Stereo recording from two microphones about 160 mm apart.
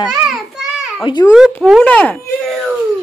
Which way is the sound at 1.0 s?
25° left (ahead or behind).